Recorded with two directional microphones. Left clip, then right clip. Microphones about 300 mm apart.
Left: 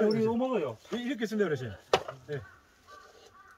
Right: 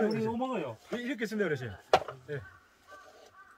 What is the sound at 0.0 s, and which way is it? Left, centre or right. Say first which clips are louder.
Speech: left 4 dB; centre.